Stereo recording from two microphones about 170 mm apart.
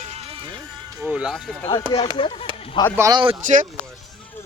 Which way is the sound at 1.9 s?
35° left (ahead or behind).